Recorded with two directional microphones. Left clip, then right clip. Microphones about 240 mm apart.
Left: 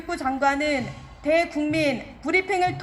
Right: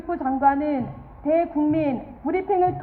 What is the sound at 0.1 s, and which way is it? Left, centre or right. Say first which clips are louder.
A woman's voice: right 3 dB; left.